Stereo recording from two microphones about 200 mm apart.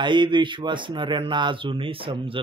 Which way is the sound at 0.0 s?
25° right (ahead or behind).